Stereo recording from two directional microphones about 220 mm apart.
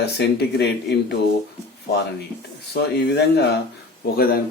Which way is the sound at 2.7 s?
50° left (ahead or behind).